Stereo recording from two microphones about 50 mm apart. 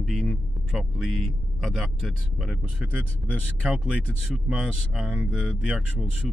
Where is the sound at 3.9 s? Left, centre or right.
Centre.